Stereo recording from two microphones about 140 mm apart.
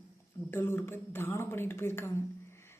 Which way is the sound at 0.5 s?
15° left (ahead or behind).